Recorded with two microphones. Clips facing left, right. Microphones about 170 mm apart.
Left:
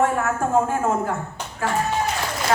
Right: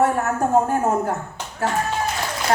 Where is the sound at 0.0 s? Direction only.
40° right (ahead or behind).